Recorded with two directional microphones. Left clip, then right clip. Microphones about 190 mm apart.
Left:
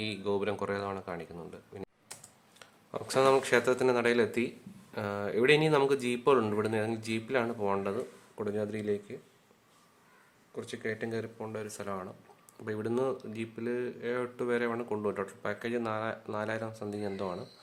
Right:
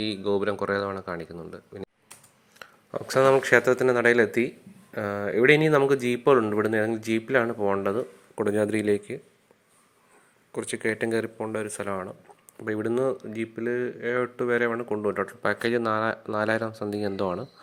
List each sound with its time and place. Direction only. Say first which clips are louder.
0.0 s speech: right 6 dB; 25° right (ahead or behind); by 9.1 s 40° right (ahead or behind)
10.5 s speech: right 9 dB; 40° right (ahead or behind); by 15.4 s 25° right (ahead or behind)
15.4 s speech: right 10 dB; 40° right (ahead or behind)